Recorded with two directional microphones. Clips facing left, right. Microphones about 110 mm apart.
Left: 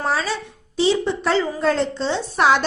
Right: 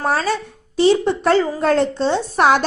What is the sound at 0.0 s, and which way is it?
A woman's voice, 50° right (ahead or behind).